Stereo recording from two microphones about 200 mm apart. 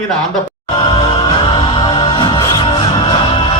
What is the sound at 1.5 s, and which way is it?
Music, 20° left (ahead or behind).